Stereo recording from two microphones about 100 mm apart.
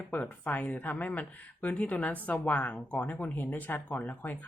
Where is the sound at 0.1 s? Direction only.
15° left (ahead or behind).